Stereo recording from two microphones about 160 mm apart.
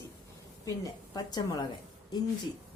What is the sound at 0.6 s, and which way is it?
A woman's voice, 25° left (ahead or behind).